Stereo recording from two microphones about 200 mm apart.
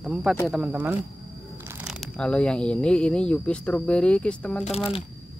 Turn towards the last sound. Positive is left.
turn(degrees=30)  # may be behind; listen again after turning